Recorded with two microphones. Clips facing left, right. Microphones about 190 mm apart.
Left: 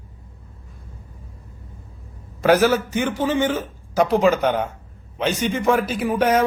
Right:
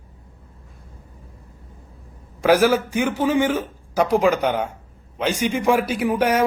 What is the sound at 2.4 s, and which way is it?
Speech, 10° right (ahead or behind).